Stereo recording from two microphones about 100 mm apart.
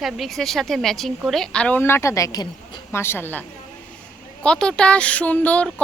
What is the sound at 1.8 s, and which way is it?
Speech, 25° left (ahead or behind).